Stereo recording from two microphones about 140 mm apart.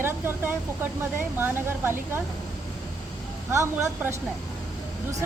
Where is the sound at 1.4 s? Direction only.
15° right (ahead or behind).